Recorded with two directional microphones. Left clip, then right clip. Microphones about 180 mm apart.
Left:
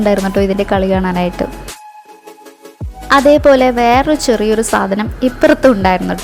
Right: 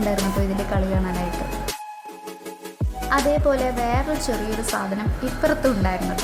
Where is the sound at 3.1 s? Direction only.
45° left (ahead or behind).